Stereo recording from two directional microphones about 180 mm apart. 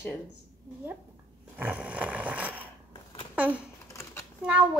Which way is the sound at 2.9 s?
30° left (ahead or behind).